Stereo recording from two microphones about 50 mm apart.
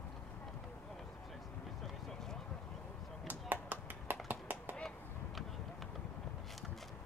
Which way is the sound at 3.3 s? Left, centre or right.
Right.